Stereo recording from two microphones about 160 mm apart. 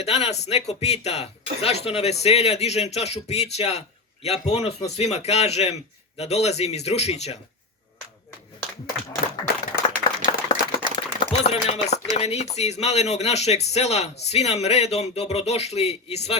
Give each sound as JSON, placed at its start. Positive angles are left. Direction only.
{"t": 0.0, "sound": "a man's voice", "side_deg": 40}
{"t": 9.7, "sound": "applause", "side_deg": 80}
{"t": 10.2, "sound": "a sound", "side_deg": 30}
{"t": 12.1, "sound": "a man's voice", "side_deg": 40}